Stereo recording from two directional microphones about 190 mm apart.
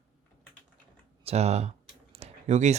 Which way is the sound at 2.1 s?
35° right (ahead or behind).